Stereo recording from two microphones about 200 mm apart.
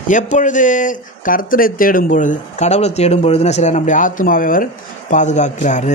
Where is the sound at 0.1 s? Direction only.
40° left (ahead or behind).